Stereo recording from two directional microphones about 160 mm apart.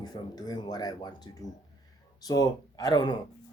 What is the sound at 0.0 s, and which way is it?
Speech, 25° left (ahead or behind).